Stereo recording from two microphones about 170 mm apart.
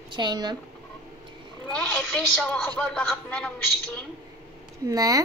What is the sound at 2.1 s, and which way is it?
A woman's voice, 5° left (ahead or behind).